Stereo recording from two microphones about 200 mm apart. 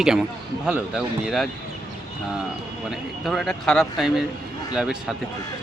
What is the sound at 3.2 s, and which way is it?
Speech, centre (ahead or behind).